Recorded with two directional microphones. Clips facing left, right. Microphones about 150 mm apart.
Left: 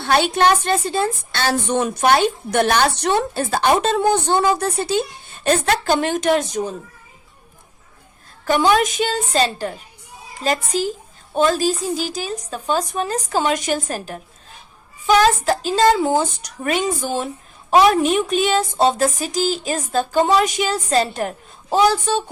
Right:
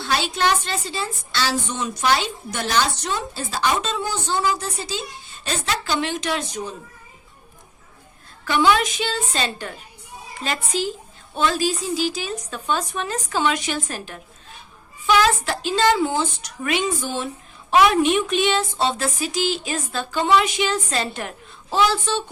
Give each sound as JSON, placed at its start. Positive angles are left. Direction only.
{"t": 0.0, "sound": "a woman's voice", "side_deg": 55}
{"t": 8.4, "sound": "a woman's voice", "side_deg": 45}